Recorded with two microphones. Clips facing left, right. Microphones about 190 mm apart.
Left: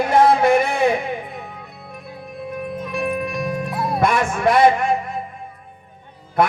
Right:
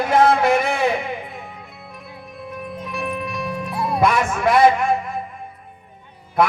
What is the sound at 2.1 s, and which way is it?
Music, 50° left (ahead or behind).